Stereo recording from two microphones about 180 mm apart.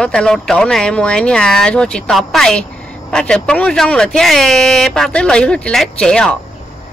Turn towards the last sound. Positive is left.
turn(degrees=5)  # may be behind; listen again after turning